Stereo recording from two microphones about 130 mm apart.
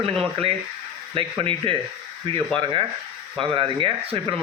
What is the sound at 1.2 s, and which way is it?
A man's voice, 45° right (ahead or behind).